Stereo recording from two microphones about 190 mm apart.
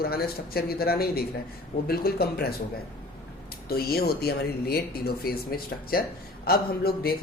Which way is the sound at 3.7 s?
55° left (ahead or behind).